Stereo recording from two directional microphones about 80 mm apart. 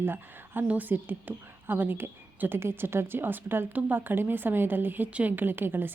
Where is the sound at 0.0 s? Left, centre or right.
Right.